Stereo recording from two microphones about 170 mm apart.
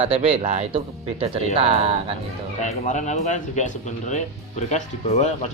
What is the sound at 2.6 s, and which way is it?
Speech, 45° left (ahead or behind).